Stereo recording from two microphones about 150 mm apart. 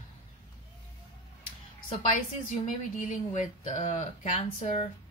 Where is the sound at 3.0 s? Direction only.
55° left (ahead or behind).